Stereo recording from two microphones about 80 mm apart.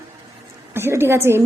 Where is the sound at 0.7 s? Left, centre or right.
Right.